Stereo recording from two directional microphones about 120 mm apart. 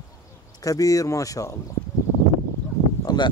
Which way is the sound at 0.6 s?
30° left (ahead or behind).